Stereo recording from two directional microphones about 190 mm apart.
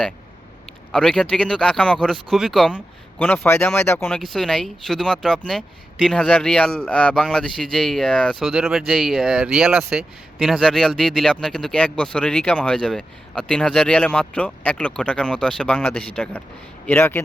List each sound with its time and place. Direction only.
0.9 s a man's voice: 5° left (ahead or behind)